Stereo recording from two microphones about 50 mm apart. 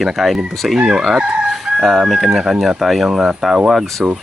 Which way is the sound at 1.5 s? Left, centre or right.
Centre.